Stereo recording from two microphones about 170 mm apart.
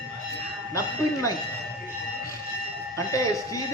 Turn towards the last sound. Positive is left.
turn(degrees=20)  # may be behind; listen again after turning